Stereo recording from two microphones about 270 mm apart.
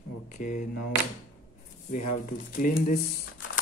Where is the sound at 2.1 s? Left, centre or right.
Left.